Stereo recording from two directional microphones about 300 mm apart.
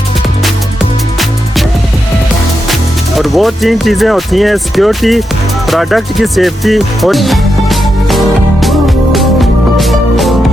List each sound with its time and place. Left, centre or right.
3.2 s speech: centre
8.6 s music: centre